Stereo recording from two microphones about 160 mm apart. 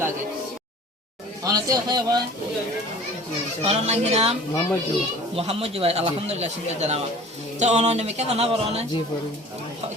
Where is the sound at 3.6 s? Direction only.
40° right (ahead or behind).